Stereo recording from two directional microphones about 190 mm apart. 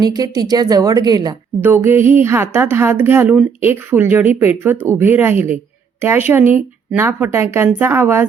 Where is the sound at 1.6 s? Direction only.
10° right (ahead or behind).